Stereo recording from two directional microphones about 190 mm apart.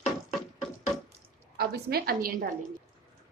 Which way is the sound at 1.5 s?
55° right (ahead or behind).